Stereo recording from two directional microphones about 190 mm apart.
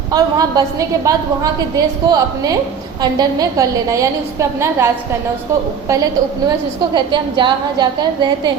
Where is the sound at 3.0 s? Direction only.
20° right (ahead or behind).